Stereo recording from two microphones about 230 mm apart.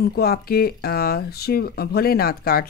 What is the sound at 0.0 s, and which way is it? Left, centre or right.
Speech, left.